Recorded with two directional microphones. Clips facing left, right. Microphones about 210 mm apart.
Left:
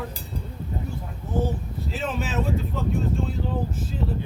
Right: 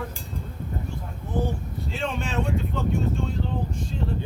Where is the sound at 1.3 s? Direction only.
Centre (ahead or behind).